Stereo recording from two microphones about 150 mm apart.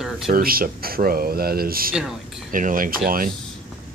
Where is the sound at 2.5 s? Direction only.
65° right (ahead or behind).